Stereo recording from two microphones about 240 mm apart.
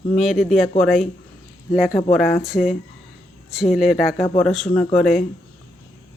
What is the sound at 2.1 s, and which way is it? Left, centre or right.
Speech, centre.